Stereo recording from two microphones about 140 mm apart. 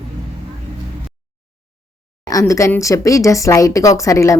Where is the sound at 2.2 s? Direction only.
25° left (ahead or behind).